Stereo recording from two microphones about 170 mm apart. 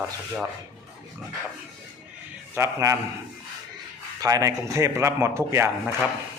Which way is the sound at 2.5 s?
15° right (ahead or behind).